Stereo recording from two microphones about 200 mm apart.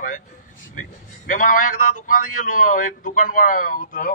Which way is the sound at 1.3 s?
40° left (ahead or behind).